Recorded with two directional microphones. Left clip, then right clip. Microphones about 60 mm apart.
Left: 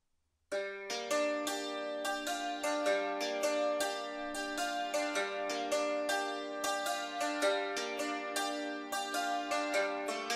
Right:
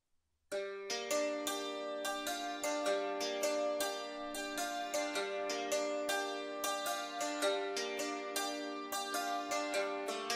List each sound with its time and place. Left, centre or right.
1.1 s music: right
2.6 s music: right
9.1 s music: right